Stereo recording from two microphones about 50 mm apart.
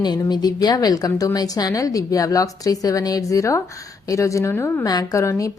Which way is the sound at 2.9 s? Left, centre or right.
Left.